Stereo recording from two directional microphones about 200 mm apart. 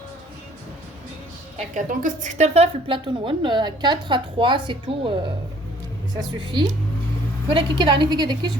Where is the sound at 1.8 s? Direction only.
40° right (ahead or behind); by 5.1 s 25° right (ahead or behind).